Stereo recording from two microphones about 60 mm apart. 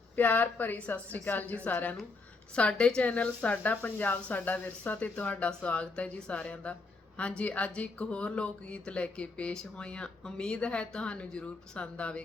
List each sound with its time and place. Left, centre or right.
0.2 s speech: left